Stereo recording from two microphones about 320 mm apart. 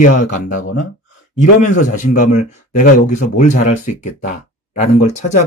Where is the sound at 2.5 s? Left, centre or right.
Left.